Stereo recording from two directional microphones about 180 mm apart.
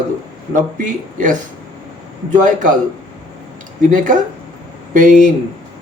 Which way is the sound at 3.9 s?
45° right (ahead or behind).